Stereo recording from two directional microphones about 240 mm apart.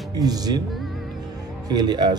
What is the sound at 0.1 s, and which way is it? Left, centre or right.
Speech, centre.